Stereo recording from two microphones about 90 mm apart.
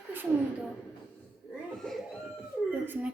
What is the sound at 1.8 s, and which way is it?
Speech, 5° left (ahead or behind).